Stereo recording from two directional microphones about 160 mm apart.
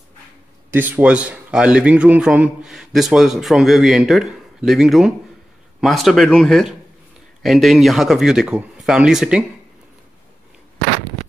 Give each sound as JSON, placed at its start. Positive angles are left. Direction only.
{"t": 0.7, "sound": "a man's voice", "side_deg": -10}